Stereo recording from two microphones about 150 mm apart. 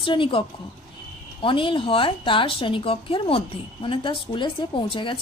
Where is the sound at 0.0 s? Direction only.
35° left (ahead or behind).